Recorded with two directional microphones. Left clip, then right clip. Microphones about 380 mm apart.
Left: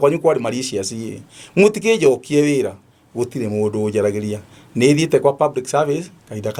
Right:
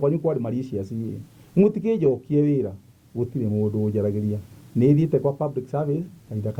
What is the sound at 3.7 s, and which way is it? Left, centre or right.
Speech, centre.